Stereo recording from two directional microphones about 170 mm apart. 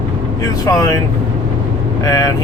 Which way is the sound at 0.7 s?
20° left (ahead or behind).